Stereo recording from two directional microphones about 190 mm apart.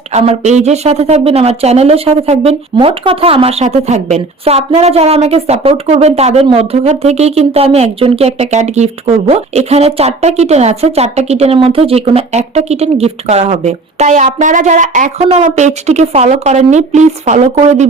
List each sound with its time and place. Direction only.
0.1 s a woman's voice: 35° right (ahead or behind)